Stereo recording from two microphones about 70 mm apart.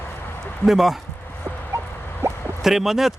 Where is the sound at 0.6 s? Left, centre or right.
Centre.